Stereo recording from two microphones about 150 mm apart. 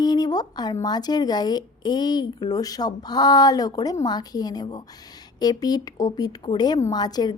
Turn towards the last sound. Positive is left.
turn(degrees=25)  # may be behind; listen again after turning